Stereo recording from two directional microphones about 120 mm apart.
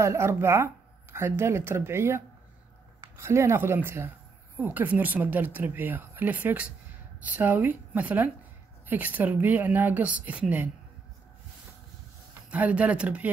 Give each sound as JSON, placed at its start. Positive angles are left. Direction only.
{"t": 0.0, "sound": "a woman's voice", "side_deg": -20}
{"t": 12.4, "sound": "a woman's voice", "side_deg": -10}